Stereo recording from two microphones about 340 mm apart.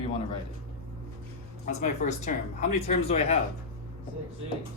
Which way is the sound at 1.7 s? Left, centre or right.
Left.